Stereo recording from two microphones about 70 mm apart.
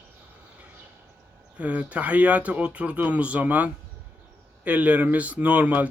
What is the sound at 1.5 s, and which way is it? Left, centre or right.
Speech, centre.